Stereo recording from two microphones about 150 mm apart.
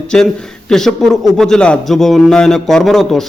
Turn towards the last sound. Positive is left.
turn(degrees=0)  # may be behind; listen again after turning